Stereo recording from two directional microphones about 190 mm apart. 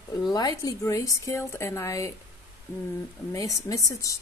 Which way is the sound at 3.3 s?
15° left (ahead or behind).